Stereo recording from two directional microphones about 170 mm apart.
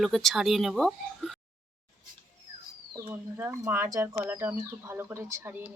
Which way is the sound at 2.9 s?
20° right (ahead or behind).